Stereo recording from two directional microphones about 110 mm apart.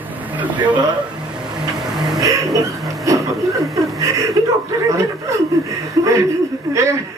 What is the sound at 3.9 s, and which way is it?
Speech, 30° right (ahead or behind).